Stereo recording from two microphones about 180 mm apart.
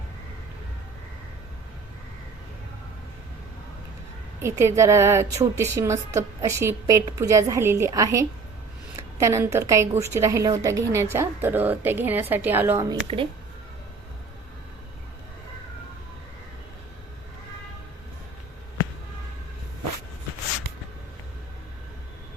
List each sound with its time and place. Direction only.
4.4 s a woman's voice: 15° right (ahead or behind)
13.1 s speech: 30° right (ahead or behind)